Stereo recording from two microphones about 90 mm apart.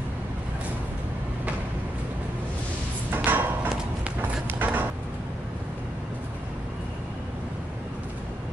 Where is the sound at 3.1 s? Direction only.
20° right (ahead or behind).